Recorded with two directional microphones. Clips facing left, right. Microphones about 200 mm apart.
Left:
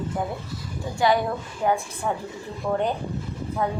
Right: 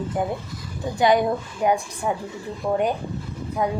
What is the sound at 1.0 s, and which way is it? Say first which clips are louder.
Speech: right 3 dB; 20° right (ahead or behind).